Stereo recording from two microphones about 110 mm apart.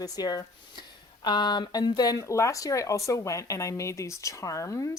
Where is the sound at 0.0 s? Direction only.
35° left (ahead or behind).